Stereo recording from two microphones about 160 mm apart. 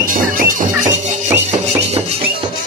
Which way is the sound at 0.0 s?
55° right (ahead or behind).